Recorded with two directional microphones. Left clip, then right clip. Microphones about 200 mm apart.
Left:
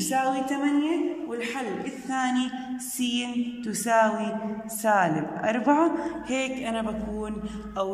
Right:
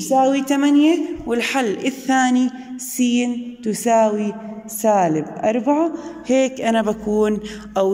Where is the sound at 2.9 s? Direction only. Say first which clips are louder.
Right 9 dB; 20° right (ahead or behind); by 7.9 s 40° right (ahead or behind).